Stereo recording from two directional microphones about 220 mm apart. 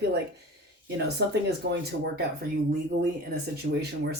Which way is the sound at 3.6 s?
50° right (ahead or behind).